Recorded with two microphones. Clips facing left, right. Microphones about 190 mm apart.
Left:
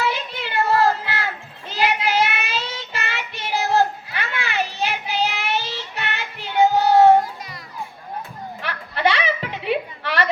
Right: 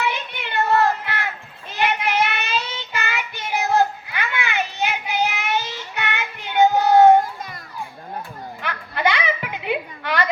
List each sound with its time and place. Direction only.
0.0 s music: 30° left (ahead or behind)
1.7 s child singing: 30° left (ahead or behind)
8.6 s a sound: 35° left (ahead or behind)